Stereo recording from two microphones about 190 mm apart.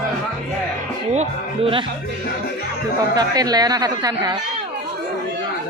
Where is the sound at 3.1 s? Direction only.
20° right (ahead or behind).